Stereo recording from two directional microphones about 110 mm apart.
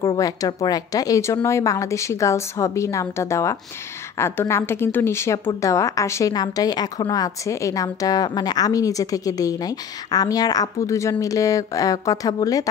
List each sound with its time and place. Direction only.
0.2 s a woman's voice: 35° left (ahead or behind)